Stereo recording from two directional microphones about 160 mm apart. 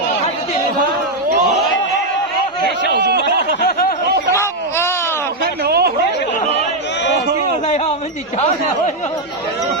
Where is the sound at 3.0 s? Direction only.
90° right.